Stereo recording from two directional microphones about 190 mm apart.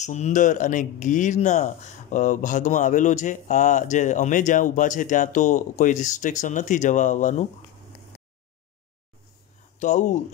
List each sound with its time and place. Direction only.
0.0 s speech: 40° left (ahead or behind)
9.8 s speech: 40° left (ahead or behind)